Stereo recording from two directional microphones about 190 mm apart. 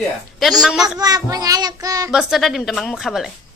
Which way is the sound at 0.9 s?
20° right (ahead or behind).